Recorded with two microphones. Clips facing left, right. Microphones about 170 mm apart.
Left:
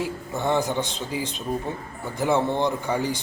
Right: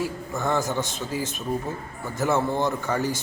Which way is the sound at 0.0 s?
20° left (ahead or behind).